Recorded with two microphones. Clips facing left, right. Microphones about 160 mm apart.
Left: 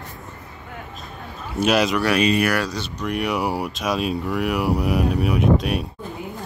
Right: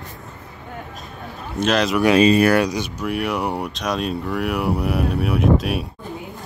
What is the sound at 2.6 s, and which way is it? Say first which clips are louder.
Speech: right 5 dB; 15° right (ahead or behind).